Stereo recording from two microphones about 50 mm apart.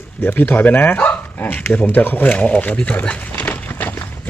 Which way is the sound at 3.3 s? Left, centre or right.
Left.